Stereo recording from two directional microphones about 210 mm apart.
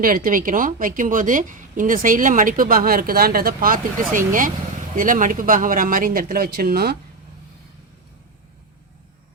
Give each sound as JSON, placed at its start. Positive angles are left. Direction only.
{"t": 0.0, "sound": "a woman's voice", "side_deg": -40}